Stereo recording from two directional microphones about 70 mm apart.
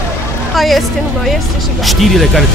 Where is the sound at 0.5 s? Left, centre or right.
Centre.